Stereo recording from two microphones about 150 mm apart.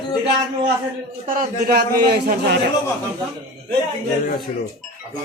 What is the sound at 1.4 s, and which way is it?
A man's voice, 85° right.